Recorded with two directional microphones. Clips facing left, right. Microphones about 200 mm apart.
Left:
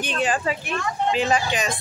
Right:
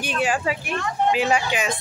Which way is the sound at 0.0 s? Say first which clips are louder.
Even; 10° right (ahead or behind).